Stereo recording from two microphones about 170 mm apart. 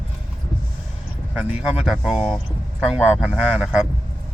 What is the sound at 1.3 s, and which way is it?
Speech, 10° right (ahead or behind).